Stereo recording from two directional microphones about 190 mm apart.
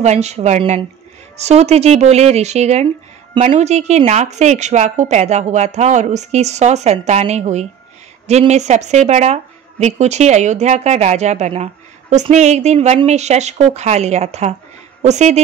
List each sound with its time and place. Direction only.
0.0 s a woman's voice: 35° right (ahead or behind)